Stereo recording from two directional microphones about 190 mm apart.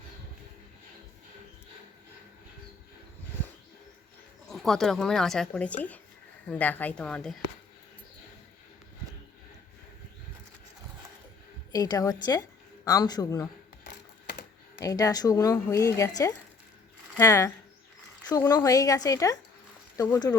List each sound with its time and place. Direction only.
4.4 s speech: centre (ahead or behind)
11.7 s a woman's voice: 20° left (ahead or behind)
14.8 s speech: 20° left (ahead or behind)
18.5 s speech: 20° left (ahead or behind)